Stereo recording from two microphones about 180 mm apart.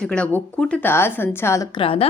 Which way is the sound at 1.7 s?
30° left (ahead or behind).